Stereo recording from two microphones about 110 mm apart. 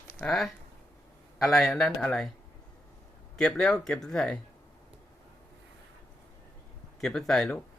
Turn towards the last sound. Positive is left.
turn(degrees=5)  # may be behind; listen again after turning